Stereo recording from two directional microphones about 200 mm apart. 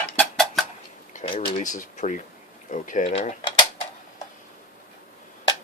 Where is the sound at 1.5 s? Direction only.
35° left (ahead or behind).